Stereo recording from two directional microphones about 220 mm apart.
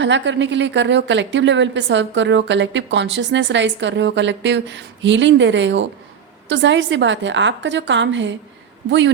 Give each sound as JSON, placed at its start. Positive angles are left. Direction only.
{"t": 0.0, "sound": "a woman's voice", "side_deg": -55}